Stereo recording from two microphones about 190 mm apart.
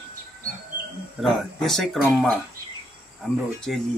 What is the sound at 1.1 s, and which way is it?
Speech, centre (ahead or behind).